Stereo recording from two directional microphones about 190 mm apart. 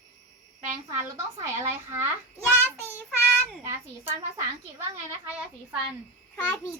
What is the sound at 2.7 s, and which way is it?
Child singing, 10° left (ahead or behind).